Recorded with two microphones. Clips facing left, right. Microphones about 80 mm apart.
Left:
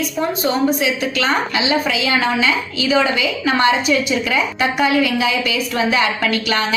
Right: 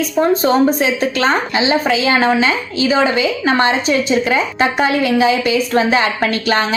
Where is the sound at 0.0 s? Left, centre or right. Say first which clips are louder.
Right 5 dB; right.